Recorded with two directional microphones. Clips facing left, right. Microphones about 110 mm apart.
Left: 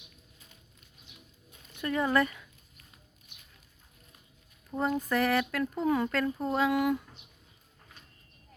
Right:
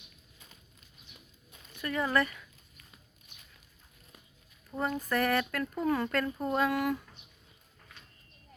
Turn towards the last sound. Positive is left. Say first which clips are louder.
# left 2 dB
turn(degrees=15)  # may be behind; listen again after turning